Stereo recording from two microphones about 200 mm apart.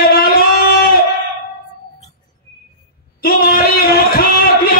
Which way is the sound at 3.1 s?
50° left (ahead or behind).